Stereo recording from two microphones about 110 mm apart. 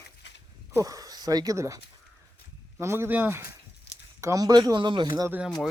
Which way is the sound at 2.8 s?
20° right (ahead or behind).